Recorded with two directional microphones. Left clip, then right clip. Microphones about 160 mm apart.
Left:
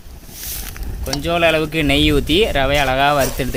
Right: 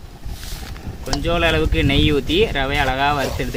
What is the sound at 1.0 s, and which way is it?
Speech, 55° left (ahead or behind).